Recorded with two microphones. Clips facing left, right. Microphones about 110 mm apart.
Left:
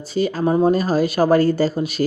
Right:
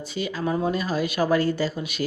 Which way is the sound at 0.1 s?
40° left (ahead or behind).